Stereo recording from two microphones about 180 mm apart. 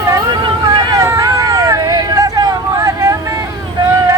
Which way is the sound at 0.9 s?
20° right (ahead or behind).